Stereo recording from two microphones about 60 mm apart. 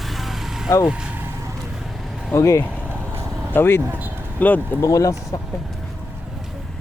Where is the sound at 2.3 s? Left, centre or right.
Left.